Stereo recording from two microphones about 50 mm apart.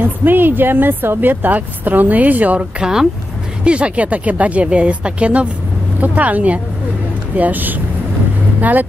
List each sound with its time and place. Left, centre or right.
0.0 s a woman's voice: right
2.8 s speech: centre
3.6 s speech: right
5.9 s a woman's voice: right